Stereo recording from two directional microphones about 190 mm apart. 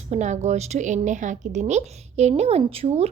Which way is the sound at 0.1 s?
35° right (ahead or behind).